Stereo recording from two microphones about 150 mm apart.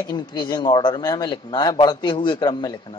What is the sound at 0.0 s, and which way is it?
Speech, 30° left (ahead or behind).